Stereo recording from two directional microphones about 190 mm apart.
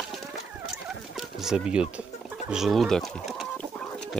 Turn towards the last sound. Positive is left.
turn(degrees=0)  # may be behind; listen again after turning